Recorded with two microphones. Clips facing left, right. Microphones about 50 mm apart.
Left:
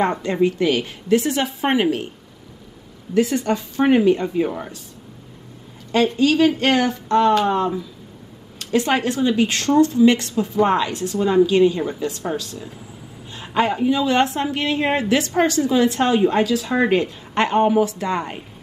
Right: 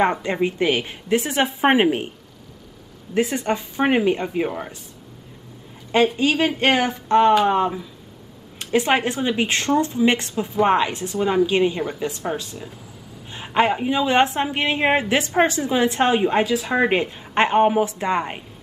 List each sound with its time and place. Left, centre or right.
0.0 s a woman's voice: right
3.2 s a woman's voice: right
6.1 s a woman's voice: right